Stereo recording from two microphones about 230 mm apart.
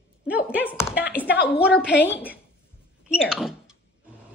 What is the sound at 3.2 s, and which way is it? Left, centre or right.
Speech, centre.